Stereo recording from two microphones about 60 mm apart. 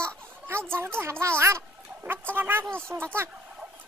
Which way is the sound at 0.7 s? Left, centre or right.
Right.